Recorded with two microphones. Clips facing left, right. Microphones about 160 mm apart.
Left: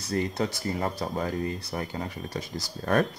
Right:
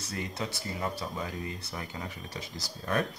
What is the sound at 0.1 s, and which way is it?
Speech, 40° left (ahead or behind).